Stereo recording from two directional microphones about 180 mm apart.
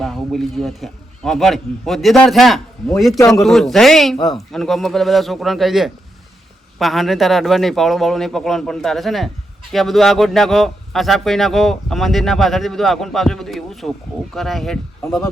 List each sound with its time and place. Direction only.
0.0 s a man's voice: centre (ahead or behind)
3.2 s a man's voice: 20° left (ahead or behind)
3.4 s speech: centre (ahead or behind)